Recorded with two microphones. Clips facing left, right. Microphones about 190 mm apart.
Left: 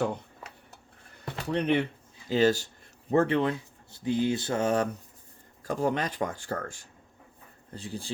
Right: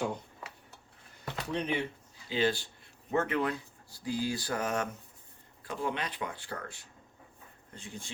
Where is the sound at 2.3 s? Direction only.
40° left (ahead or behind).